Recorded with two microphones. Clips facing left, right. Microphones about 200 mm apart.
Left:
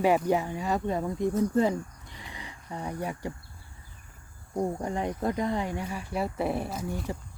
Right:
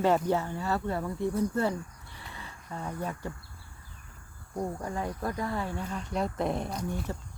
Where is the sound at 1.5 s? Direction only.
15° left (ahead or behind).